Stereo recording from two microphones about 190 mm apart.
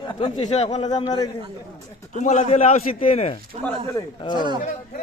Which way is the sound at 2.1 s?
40° left (ahead or behind).